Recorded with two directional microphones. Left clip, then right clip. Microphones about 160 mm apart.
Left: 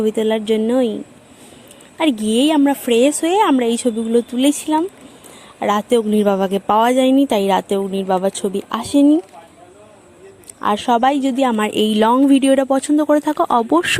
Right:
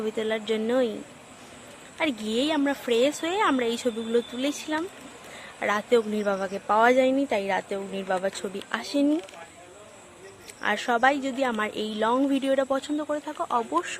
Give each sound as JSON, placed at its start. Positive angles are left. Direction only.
{"t": 0.0, "sound": "speech", "side_deg": 35}
{"t": 2.0, "sound": "speech", "side_deg": 35}
{"t": 8.0, "sound": "speech", "side_deg": 35}
{"t": 10.6, "sound": "speech", "side_deg": 30}
{"t": 13.1, "sound": "speech", "side_deg": 60}